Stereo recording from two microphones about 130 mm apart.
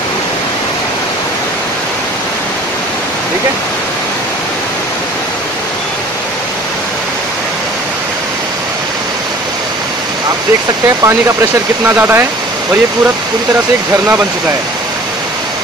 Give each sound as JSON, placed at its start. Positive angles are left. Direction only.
{"t": 11.8, "sound": "speech", "side_deg": -15}